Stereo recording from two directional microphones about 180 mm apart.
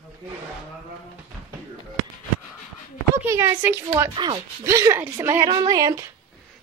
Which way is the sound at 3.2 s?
15° right (ahead or behind).